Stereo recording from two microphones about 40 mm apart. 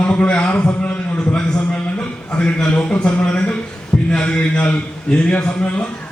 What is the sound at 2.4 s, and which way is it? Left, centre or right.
A man's voice, left.